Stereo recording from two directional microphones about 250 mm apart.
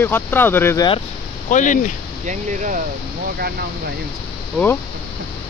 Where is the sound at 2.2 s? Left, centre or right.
Right.